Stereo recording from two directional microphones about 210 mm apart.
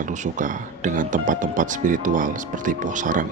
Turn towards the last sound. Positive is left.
turn(degrees=-40)  # may be behind; listen again after turning